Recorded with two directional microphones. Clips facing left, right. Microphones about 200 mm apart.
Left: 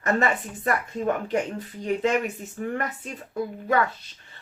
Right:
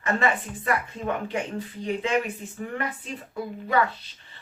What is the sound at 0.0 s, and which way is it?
A woman's voice, 40° left (ahead or behind).